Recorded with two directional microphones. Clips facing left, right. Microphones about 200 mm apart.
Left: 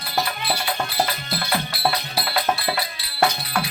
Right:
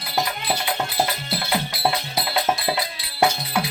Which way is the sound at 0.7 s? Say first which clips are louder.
Even; 15° right (ahead or behind).